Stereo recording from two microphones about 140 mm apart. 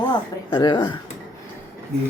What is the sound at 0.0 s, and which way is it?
Speech, 30° left (ahead or behind).